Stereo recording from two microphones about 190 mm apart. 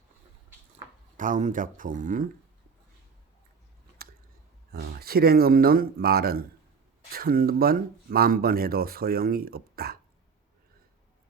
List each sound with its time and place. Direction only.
1.1 s speech: 45° right (ahead or behind)
4.7 s speech: 55° right (ahead or behind)